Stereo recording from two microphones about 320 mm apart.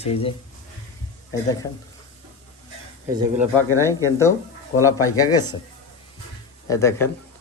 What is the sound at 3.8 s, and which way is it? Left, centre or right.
Speech, centre.